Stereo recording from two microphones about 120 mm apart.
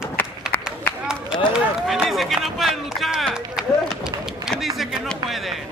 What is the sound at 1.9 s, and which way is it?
Speech, centre (ahead or behind).